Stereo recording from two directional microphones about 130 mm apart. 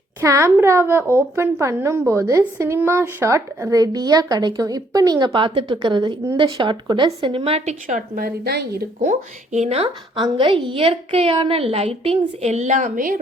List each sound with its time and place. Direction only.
0.2 s a woman's voice: 20° right (ahead or behind); by 8.2 s 80° right
9.0 s speech: 65° right (ahead or behind)
10.2 s a woman's voice: 40° right (ahead or behind); by 13.1 s 85° right